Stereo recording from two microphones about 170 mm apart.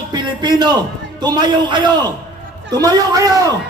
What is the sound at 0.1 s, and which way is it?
A man's voice, 25° right (ahead or behind).